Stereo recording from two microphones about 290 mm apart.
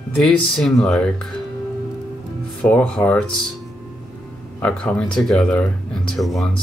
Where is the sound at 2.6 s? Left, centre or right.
Centre.